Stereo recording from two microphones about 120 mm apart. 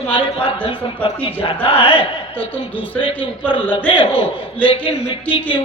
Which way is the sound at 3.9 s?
45° left (ahead or behind).